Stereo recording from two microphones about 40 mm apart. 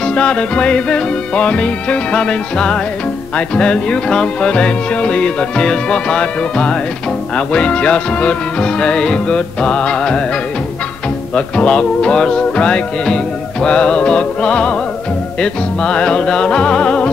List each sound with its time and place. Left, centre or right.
0.0 s music: left
11.3 s music: left